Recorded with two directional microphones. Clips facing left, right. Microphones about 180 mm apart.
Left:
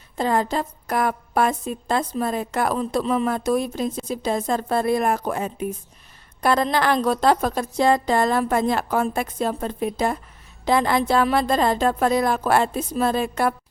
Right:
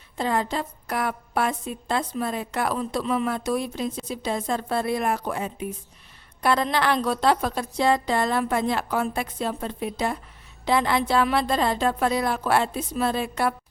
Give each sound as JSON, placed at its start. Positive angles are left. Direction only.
{"t": 0.2, "sound": "a woman's voice", "side_deg": 45}